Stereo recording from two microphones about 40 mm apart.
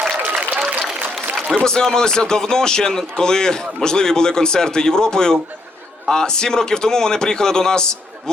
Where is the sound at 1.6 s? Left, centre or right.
Centre.